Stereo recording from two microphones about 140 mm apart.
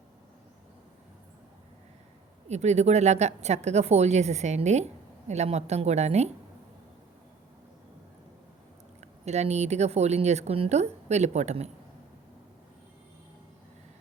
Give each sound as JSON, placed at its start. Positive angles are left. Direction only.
{"t": 2.5, "sound": "a woman's voice", "side_deg": -55}
{"t": 9.0, "sound": "a woman's voice", "side_deg": -50}